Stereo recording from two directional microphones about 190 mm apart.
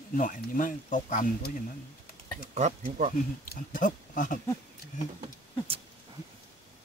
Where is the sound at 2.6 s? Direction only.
40° right (ahead or behind).